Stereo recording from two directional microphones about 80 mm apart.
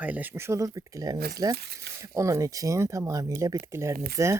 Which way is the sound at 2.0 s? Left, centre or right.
Right.